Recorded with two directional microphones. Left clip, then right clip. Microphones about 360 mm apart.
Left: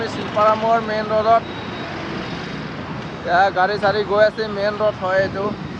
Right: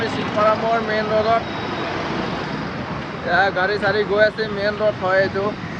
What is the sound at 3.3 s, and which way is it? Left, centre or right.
Speech, centre.